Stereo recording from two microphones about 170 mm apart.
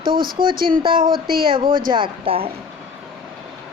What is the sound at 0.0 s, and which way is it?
Speech, 60° right (ahead or behind).